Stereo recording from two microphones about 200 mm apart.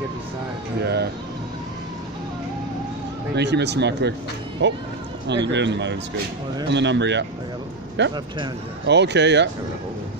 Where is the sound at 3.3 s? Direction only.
60° right (ahead or behind).